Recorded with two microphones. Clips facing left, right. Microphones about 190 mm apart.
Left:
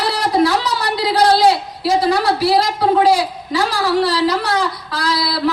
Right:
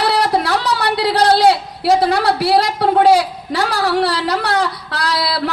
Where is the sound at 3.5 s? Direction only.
60° right (ahead or behind).